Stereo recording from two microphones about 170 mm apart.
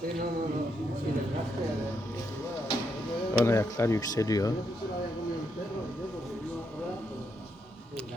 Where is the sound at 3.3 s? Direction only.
15° left (ahead or behind).